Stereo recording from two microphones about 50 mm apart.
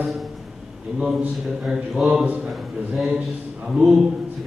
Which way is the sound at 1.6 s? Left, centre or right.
Centre.